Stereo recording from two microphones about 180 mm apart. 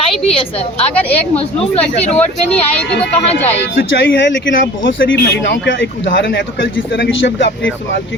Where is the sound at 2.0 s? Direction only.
40° left (ahead or behind).